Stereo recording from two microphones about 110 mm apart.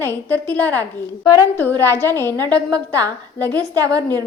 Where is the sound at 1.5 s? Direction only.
20° left (ahead or behind).